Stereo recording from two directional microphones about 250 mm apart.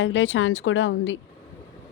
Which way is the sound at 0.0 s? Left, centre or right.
Left.